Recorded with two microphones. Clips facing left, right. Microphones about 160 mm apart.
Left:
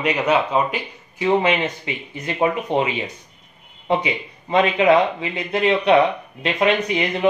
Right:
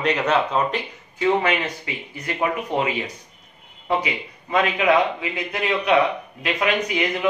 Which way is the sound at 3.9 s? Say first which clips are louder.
Left 3 dB; 25° left (ahead or behind).